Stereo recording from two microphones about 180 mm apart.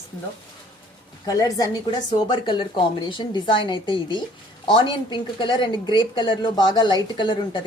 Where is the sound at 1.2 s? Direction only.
20° left (ahead or behind).